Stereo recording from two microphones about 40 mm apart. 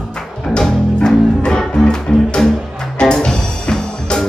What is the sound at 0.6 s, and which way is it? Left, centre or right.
Music, left.